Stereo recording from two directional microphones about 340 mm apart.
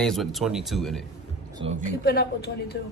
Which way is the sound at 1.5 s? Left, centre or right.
Centre.